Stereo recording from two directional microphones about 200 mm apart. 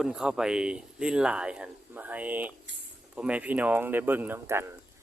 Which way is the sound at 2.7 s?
65° right (ahead or behind).